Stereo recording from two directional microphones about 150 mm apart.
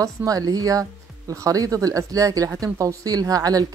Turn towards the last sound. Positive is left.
turn(degrees=-25)  # may be behind; listen again after turning